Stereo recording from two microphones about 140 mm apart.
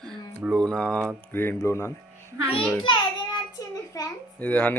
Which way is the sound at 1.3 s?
15° left (ahead or behind).